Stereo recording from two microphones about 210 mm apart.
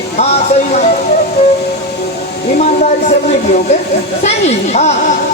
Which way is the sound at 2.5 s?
35° left (ahead or behind).